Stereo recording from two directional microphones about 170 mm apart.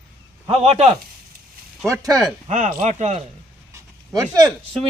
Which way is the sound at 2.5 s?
50° right (ahead or behind).